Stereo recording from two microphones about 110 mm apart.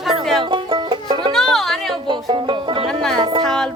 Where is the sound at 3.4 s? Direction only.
5° left (ahead or behind).